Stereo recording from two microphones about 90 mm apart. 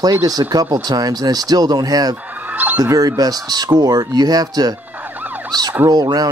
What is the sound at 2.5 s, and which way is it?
Fowl, 20° right (ahead or behind).